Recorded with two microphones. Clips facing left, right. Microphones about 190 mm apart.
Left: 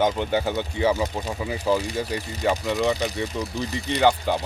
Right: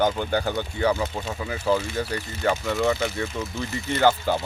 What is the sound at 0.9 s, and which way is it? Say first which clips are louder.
Speech: left 1 dB; 15° left (ahead or behind).